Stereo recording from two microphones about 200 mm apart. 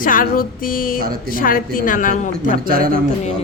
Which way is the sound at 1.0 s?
50° right (ahead or behind).